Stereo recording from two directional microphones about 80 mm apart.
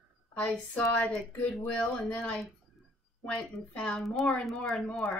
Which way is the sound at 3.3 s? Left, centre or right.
Centre.